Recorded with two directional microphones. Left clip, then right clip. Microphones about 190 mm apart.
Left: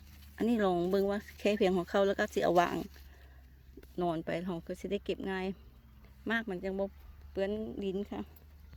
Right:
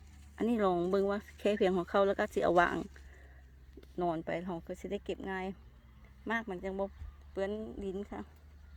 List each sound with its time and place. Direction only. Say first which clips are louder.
0.3 s speech: even; 5° left (ahead or behind); by 8.3 s 25° left (ahead or behind)